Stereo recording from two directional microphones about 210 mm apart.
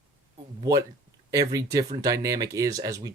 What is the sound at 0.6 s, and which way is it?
Speech, 15° right (ahead or behind).